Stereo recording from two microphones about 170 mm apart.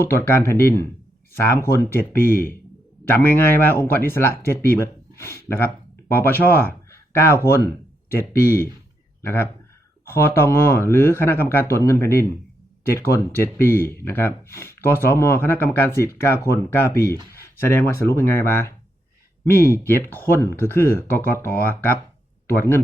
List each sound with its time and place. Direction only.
0.0 s speech: 15° left (ahead or behind)
2.2 s speech: 55° left (ahead or behind)
3.0 s speech: 15° left (ahead or behind)
9.2 s speech: 15° left (ahead or behind)